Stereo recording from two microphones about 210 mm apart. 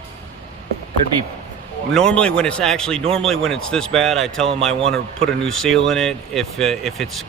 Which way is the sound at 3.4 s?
5° left (ahead or behind).